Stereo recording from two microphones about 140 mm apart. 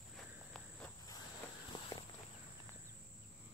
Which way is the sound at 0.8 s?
25° left (ahead or behind).